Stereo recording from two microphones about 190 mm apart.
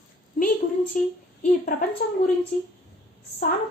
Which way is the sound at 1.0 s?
40° left (ahead or behind).